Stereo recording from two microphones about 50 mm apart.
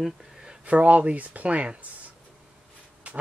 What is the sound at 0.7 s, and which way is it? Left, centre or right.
Speech, right.